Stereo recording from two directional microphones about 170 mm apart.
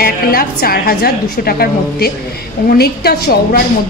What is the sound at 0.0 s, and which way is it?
A woman's voice, 60° left (ahead or behind).